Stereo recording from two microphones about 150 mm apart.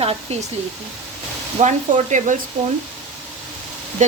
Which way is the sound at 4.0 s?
55° right (ahead or behind).